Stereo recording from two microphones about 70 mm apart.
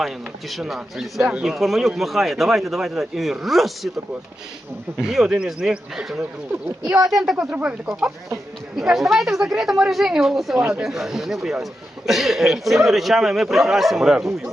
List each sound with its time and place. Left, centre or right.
0.0 s a man's voice: centre
1.3 s speech: centre
1.5 s a man's voice: centre
4.9 s speech: centre
6.9 s a man's voice: centre
7.3 s speech: centre
8.7 s a man's voice: centre